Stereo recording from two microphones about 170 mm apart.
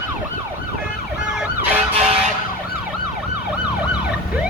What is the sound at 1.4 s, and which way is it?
Ambulance, 10° right (ahead or behind).